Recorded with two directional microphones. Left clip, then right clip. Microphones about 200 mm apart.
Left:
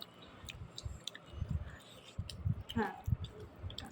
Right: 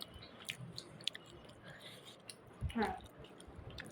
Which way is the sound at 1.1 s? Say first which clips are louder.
Right 5 dB; 20° right (ahead or behind).